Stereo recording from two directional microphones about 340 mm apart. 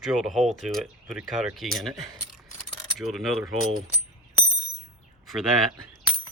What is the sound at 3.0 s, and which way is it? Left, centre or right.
Speech, centre.